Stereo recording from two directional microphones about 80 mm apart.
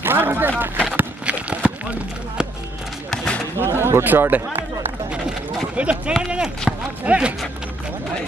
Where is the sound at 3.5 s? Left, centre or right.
Right.